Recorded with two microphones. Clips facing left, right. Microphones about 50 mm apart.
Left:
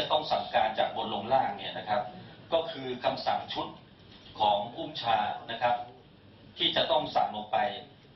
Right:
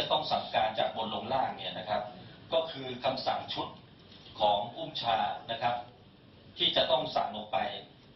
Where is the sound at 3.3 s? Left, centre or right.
Centre.